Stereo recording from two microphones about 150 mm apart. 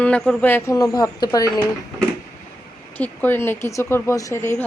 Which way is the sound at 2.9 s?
10° left (ahead or behind).